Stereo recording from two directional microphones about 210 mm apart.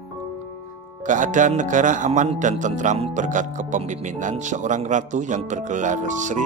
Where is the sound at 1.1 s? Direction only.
35° right (ahead or behind).